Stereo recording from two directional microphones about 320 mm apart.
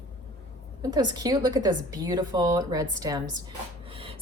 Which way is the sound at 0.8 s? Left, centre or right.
Centre.